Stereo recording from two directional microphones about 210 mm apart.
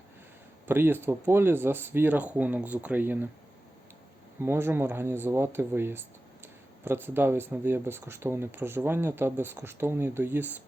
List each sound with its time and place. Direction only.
0.7 s speech: 10° right (ahead or behind)
4.4 s speech: 10° right (ahead or behind)